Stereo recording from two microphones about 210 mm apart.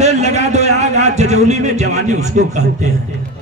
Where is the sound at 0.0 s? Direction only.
35° right (ahead or behind).